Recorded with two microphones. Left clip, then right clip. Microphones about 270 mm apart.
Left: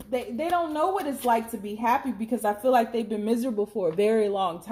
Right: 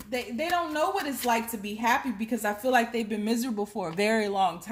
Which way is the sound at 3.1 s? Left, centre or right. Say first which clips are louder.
Left 4 dB; right.